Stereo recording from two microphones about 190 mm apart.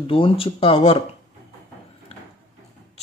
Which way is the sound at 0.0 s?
30° left (ahead or behind).